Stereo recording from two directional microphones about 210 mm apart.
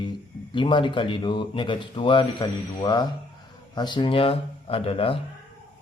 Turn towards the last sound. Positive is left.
turn(degrees=25)  # may be behind; listen again after turning